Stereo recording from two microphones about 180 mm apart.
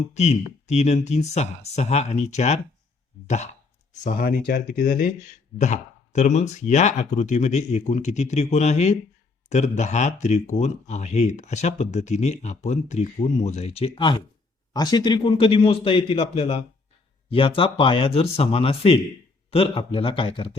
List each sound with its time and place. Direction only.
0.1 s speech: 40° left (ahead or behind)
4.0 s speech: 55° left (ahead or behind)
5.5 s speech: 40° left (ahead or behind)